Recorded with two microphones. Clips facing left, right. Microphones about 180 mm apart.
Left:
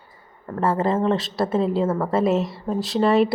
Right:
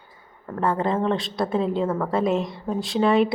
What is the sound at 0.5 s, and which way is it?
Speech, 5° left (ahead or behind).